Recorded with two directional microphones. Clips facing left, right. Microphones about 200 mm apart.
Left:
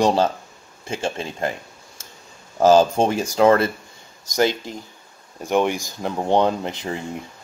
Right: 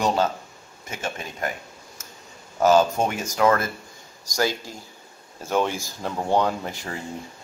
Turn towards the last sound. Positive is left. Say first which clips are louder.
# left 5 dB
turn(degrees=20)  # may be behind; listen again after turning